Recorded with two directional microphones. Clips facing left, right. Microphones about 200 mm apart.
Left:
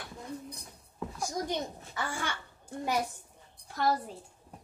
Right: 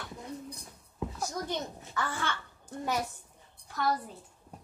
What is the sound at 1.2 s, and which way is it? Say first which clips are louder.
A child's voice: left 2 dB; 15° left (ahead or behind).